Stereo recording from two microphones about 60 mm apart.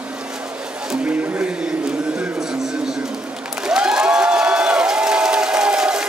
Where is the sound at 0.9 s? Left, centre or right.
Right.